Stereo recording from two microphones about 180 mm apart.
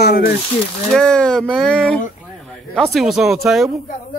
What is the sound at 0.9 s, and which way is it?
Speech, 5° left (ahead or behind).